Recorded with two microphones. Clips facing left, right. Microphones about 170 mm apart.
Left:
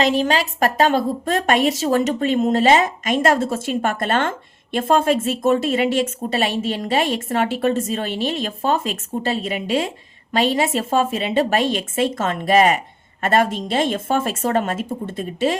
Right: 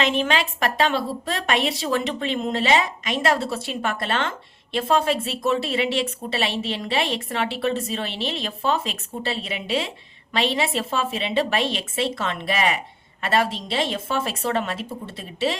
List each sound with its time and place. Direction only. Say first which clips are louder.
0.0 s a woman's voice: left 4 dB; 40° left (ahead or behind)